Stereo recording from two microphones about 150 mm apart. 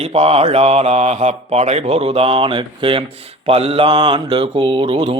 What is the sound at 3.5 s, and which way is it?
Mantra, 40° right (ahead or behind).